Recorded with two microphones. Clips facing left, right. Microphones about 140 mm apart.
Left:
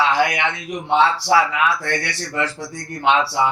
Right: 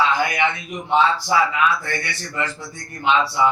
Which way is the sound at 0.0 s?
80° left.